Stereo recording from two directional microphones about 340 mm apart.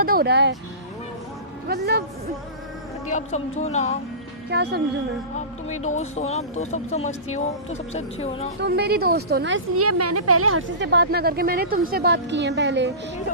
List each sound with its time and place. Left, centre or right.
0.0 s speech: right
1.6 s speech: right
3.1 s speech: centre
4.4 s speech: right
5.6 s speech: centre
8.6 s a woman's voice: right